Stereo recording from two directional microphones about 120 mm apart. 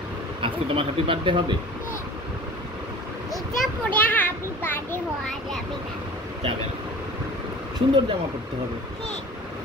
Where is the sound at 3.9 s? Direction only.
15° left (ahead or behind).